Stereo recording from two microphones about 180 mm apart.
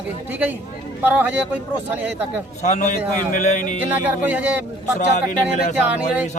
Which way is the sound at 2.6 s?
40° left (ahead or behind).